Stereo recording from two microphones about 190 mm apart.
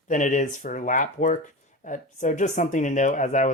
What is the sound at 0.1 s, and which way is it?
Speech, 40° left (ahead or behind).